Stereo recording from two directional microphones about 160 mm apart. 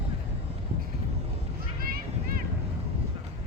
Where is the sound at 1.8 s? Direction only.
65° right (ahead or behind).